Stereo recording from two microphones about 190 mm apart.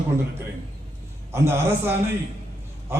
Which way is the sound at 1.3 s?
10° right (ahead or behind).